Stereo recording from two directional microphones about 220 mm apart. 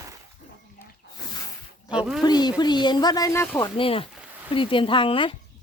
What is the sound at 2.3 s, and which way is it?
Speech, 20° left (ahead or behind).